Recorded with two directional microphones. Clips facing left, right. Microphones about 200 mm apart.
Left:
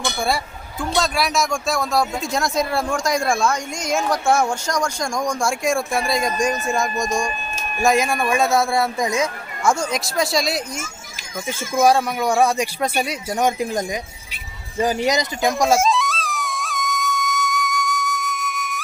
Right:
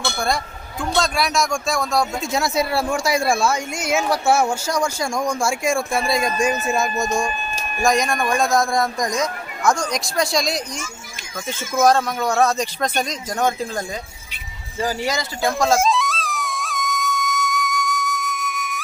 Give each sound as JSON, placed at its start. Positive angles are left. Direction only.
{"t": 0.0, "sound": "speech", "side_deg": 5}
{"t": 15.8, "sound": "music", "side_deg": 0}